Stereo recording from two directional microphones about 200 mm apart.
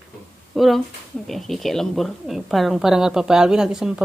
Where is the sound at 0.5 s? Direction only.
Centre (ahead or behind).